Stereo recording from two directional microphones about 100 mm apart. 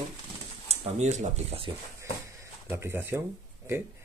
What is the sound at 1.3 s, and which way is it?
Speech, 80° right.